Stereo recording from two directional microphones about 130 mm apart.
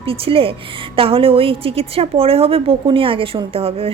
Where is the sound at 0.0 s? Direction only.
45° right (ahead or behind).